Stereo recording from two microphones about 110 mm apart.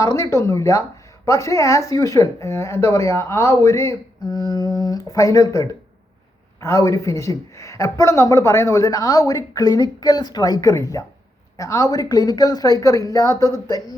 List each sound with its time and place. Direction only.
0.0 s speech: 30° left (ahead or behind)